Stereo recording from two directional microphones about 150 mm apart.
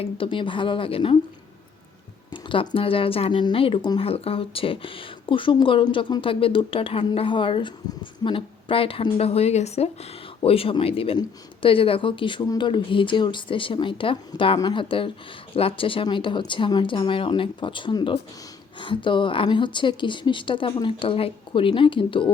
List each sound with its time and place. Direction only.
0.0 s a woman's voice: 35° left (ahead or behind)
2.3 s a woman's voice: 35° left (ahead or behind)